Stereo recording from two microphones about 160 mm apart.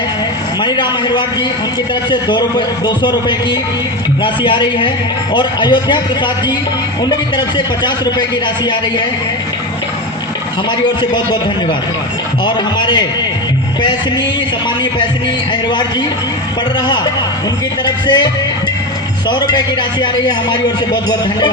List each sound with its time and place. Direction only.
0.6 s a man's voice: 30° left (ahead or behind)
12.5 s a man's voice: 30° left (ahead or behind)
17.8 s a man's voice: 25° left (ahead or behind)
19.3 s a man's voice: 25° left (ahead or behind)